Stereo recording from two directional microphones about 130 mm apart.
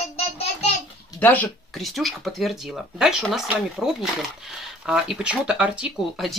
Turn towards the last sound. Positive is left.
turn(degrees=-5)  # may be behind; listen again after turning